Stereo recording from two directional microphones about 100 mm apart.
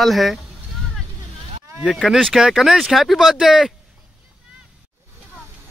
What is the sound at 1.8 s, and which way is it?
Speech, centre (ahead or behind).